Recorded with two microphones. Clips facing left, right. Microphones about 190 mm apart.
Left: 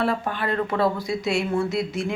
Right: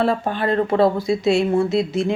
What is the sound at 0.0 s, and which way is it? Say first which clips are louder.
Speech: right 5 dB; 30° right (ahead or behind).